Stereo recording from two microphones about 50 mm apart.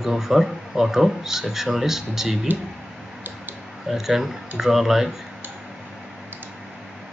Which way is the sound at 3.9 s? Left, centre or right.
Centre.